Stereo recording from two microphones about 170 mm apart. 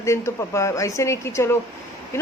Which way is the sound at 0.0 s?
15° left (ahead or behind).